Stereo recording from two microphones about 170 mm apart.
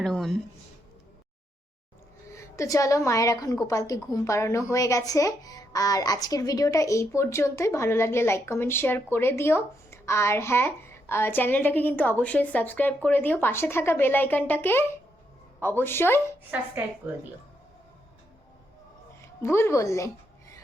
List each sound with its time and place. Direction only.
0.0 s a sound: 5° left (ahead or behind)
2.3 s a woman's voice: 15° left (ahead or behind)
19.2 s a woman's voice: 15° left (ahead or behind)